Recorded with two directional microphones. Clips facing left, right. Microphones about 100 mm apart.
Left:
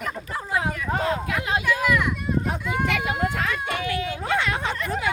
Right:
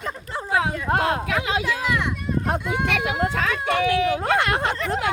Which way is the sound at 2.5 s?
85° right.